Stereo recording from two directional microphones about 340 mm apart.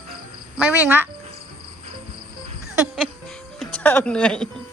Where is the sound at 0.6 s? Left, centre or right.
Centre.